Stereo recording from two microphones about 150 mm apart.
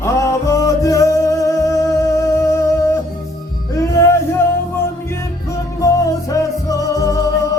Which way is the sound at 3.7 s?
20° left (ahead or behind).